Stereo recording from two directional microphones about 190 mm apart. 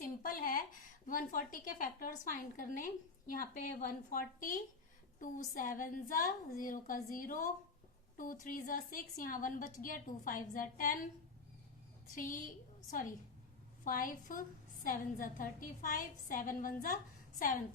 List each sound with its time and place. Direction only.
0.0 s a woman's voice: 45° left (ahead or behind)
12.1 s a woman's voice: 45° left (ahead or behind)